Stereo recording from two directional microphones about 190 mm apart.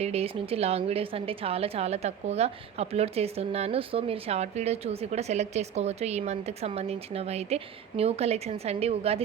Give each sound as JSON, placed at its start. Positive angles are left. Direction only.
{"t": 0.0, "sound": "a woman's voice", "side_deg": -30}